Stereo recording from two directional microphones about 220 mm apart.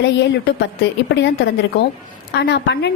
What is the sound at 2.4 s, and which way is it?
Speech, 50° left (ahead or behind).